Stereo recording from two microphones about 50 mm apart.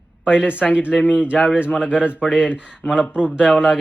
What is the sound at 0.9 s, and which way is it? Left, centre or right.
A man's voice, left.